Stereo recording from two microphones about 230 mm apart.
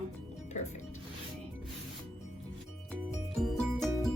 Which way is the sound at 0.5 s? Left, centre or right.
Left.